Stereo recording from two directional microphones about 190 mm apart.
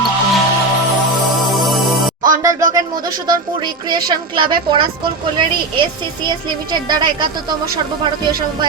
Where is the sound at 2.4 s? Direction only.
15° right (ahead or behind).